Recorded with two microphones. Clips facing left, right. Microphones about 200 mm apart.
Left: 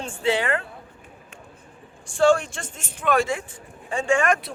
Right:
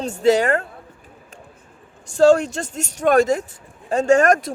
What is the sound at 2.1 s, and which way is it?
Speech, 40° right (ahead or behind).